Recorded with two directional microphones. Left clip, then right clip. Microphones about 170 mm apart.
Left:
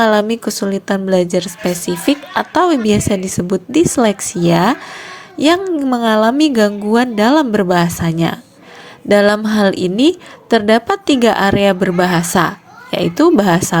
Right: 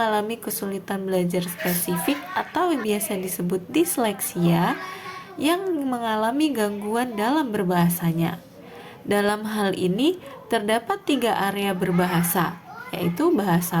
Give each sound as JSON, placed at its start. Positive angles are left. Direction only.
{"t": 0.0, "sound": "a woman's voice", "side_deg": 45}